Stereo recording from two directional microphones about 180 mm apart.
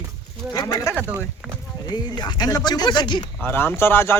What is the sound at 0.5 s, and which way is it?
Speech, 20° left (ahead or behind).